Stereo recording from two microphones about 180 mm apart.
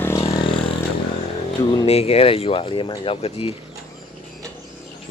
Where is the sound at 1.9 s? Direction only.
35° left (ahead or behind).